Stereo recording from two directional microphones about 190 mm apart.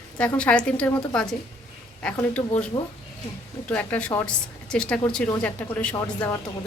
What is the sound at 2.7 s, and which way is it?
Speech, 20° left (ahead or behind).